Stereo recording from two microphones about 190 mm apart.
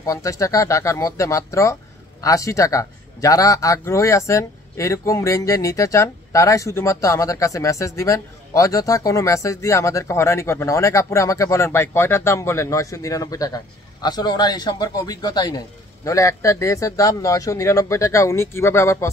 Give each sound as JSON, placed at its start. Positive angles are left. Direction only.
{"t": 0.0, "sound": "a man's voice", "side_deg": 15}